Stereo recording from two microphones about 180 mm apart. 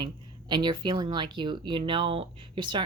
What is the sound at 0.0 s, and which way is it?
Speech, 25° right (ahead or behind).